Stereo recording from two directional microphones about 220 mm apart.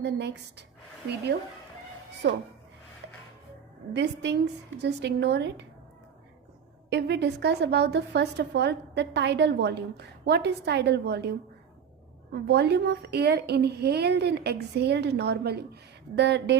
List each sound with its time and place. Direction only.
0.0 s a woman's voice: 50° right (ahead or behind)
2.2 s a woman's voice: 45° right (ahead or behind)
3.9 s a woman's voice: 50° right (ahead or behind)
6.9 s a woman's voice: 50° right (ahead or behind)